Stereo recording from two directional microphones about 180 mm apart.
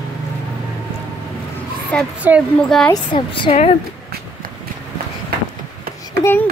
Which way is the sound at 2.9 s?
25° left (ahead or behind).